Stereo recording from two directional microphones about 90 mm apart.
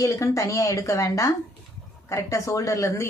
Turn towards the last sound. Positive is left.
turn(degrees=35)  # may be behind; listen again after turning